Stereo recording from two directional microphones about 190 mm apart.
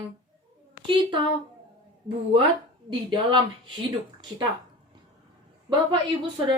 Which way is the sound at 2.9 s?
25° right (ahead or behind).